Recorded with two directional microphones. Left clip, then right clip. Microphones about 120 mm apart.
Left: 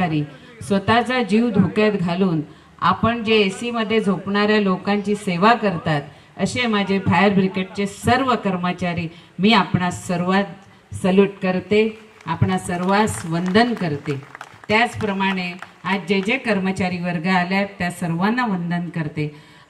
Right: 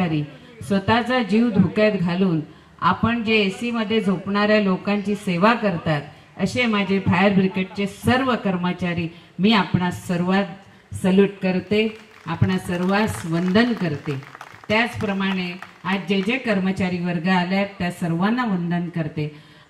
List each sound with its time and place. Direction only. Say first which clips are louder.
0.7 s a man's voice: left 2 dB; 40° left (ahead or behind)
12.3 s a man's voice: left 3 dB; 40° left (ahead or behind)